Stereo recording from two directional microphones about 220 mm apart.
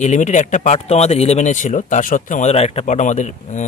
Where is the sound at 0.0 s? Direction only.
35° left (ahead or behind).